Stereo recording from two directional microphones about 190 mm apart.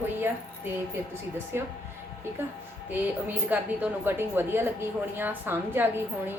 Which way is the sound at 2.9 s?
10° right (ahead or behind).